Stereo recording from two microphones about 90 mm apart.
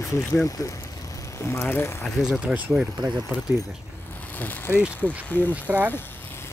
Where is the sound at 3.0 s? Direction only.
55° right (ahead or behind).